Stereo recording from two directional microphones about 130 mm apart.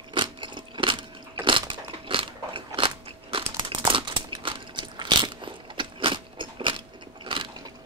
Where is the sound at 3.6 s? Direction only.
40° right (ahead or behind).